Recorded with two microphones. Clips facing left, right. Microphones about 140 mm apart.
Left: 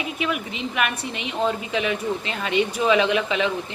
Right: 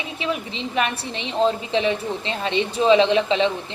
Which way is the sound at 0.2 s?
30° right (ahead or behind).